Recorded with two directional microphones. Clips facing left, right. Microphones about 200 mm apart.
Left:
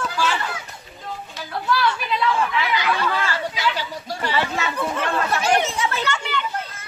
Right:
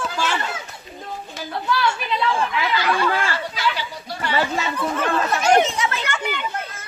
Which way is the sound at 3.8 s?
40° left (ahead or behind).